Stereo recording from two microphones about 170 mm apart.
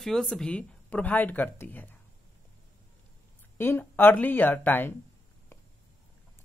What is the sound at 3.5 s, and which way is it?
Speech, 10° left (ahead or behind).